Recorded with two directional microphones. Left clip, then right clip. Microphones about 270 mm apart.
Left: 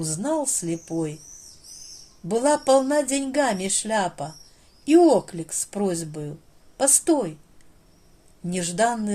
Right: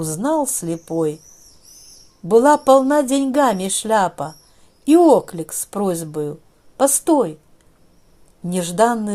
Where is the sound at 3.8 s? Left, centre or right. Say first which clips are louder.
Right 10 dB; right.